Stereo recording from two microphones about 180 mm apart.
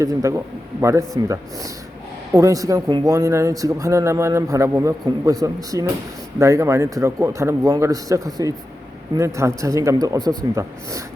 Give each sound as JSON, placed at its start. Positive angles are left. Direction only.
{"t": 0.0, "sound": "speech", "side_deg": -20}